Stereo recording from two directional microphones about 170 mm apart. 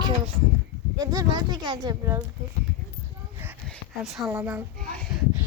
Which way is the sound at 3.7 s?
Centre (ahead or behind).